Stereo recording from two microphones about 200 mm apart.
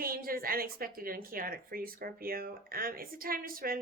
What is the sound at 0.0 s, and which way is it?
A woman's voice, 45° right (ahead or behind).